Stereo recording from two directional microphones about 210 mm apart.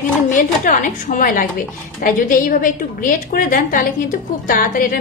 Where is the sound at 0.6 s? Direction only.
40° left (ahead or behind).